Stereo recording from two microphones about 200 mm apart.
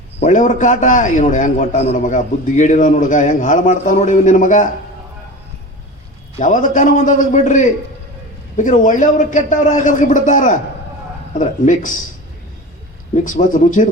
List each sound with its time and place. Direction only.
0.2 s a man's voice: 35° left (ahead or behind)
6.4 s a man's voice: 40° left (ahead or behind)
13.2 s a man's voice: 40° left (ahead or behind)